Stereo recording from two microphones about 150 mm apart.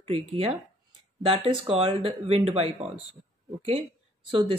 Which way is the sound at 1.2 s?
40° right (ahead or behind).